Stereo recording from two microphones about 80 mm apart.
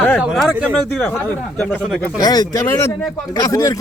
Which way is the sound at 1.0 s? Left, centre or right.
Left.